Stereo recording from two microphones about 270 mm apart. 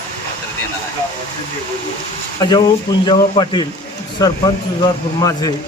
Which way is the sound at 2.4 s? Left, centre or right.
Centre.